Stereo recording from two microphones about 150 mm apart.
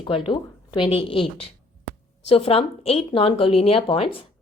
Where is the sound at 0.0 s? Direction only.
35° left (ahead or behind).